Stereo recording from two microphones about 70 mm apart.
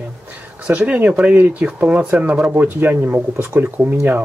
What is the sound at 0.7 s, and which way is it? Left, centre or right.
Speech, right.